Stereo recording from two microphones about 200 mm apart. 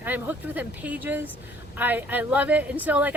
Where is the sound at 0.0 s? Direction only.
10° right (ahead or behind).